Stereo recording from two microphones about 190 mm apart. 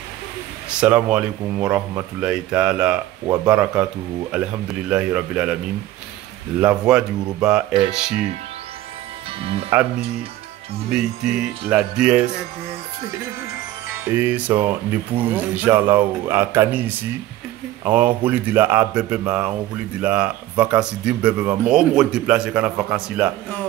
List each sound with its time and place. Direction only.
0.7 s speech: 5° right (ahead or behind)
4.3 s music: 5° right (ahead or behind)
6.6 s music: 5° right (ahead or behind)
9.4 s speech: 30° right (ahead or behind)
10.9 s music: 5° right (ahead or behind)
13.9 s speech: 10° right (ahead or behind)